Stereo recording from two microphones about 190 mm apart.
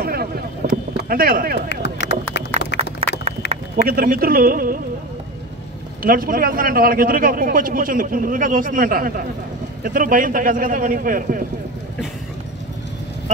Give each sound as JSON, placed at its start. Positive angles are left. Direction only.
{"t": 0.0, "sound": "boat", "side_deg": -55}
{"t": 1.0, "sound": "speech", "side_deg": -50}
{"t": 1.7, "sound": "vehicle", "side_deg": 60}
{"t": 2.3, "sound": "a sound", "side_deg": 60}
{"t": 3.7, "sound": "a man's voice", "side_deg": -50}
{"t": 6.0, "sound": "a man's voice", "side_deg": -50}